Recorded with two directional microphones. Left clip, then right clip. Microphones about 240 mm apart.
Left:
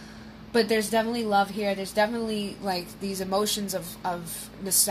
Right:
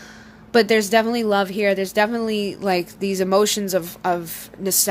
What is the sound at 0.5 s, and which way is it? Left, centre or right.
Speech, right.